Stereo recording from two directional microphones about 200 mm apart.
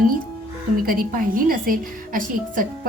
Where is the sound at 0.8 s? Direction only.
45° right (ahead or behind).